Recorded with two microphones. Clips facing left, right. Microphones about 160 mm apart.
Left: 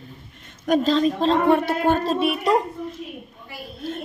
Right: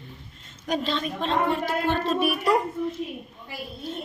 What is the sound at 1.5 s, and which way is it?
Speech, 60° left (ahead or behind).